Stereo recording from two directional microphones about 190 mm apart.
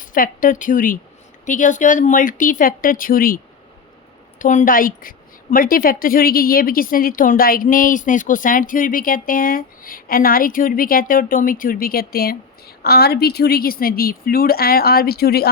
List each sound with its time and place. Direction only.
0.0 s a woman's voice: 45° left (ahead or behind)